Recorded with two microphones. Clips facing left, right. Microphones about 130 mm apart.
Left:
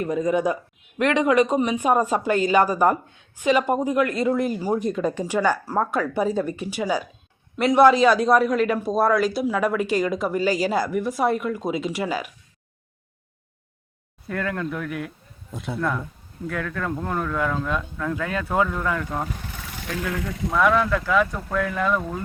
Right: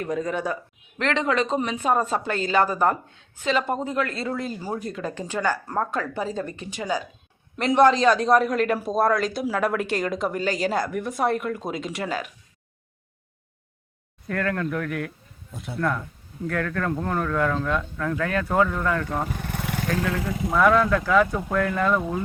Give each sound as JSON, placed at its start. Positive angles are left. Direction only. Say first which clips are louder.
{"t": 0.0, "sound": "a man's voice", "louder": "left 5 dB", "side_deg": 10}
{"t": 14.3, "sound": "speech", "louder": "right 1 dB", "side_deg": 10}
{"t": 16.5, "sound": "a man's voice", "louder": "right 2 dB", "side_deg": 5}
{"t": 19.5, "sound": "vehicle", "louder": "right 8 dB", "side_deg": -60}
{"t": 20.0, "sound": "speech", "louder": "right 2 dB", "side_deg": -30}
{"t": 20.5, "sound": "a man's voice", "louder": "right 1 dB", "side_deg": 0}